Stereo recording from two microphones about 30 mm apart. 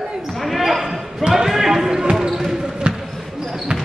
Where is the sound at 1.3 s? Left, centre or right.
Centre.